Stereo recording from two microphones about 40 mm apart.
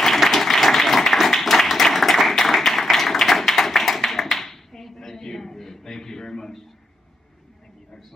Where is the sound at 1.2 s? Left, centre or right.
Centre.